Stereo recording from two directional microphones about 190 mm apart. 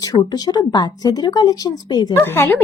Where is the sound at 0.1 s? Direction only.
20° left (ahead or behind).